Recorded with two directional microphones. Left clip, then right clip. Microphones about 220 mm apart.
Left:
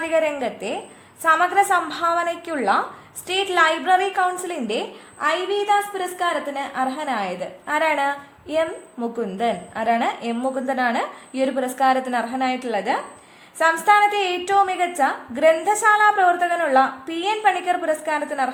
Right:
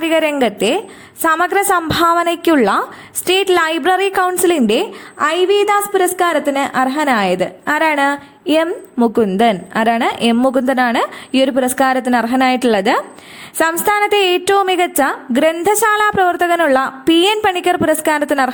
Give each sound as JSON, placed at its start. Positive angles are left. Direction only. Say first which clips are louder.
{"t": 0.0, "sound": "a woman's voice", "louder": "right 7 dB", "side_deg": -35}